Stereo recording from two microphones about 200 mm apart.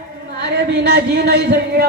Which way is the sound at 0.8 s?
55° right (ahead or behind).